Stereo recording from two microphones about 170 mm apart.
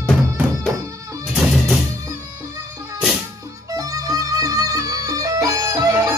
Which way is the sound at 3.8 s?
20° right (ahead or behind).